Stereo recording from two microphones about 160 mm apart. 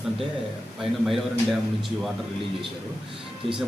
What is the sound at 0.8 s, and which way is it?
Speech, centre (ahead or behind).